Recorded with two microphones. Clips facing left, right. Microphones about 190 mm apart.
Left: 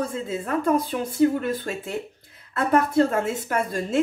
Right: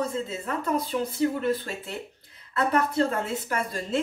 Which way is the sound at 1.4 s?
50° left (ahead or behind).